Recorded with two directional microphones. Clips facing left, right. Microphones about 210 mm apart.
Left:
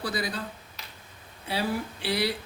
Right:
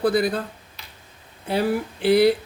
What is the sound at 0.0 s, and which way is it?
Speech, 55° right (ahead or behind).